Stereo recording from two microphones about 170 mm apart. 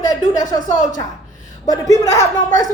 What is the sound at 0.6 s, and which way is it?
Speech, 50° left (ahead or behind).